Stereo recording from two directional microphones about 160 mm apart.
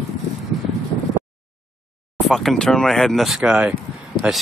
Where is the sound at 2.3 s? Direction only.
Centre (ahead or behind).